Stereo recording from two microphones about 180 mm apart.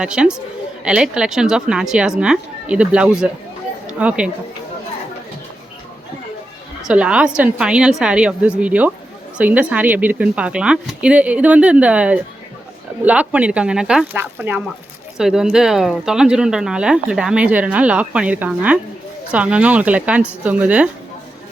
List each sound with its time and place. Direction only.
0.0 s speech: 5° right (ahead or behind)
6.8 s speech: 5° right (ahead or behind)